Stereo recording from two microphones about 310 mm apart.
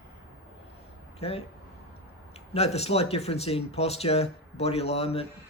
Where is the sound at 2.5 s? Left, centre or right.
Centre.